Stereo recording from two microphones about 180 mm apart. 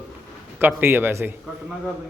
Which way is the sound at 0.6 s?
10° right (ahead or behind).